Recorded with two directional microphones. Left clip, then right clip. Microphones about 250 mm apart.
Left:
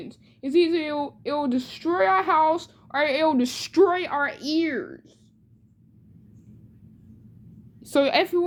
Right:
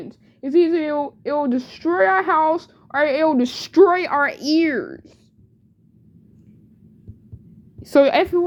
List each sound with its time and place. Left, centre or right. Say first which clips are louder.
0.0 s speech: right 3 dB; centre
7.8 s a woman's voice: right 6 dB; right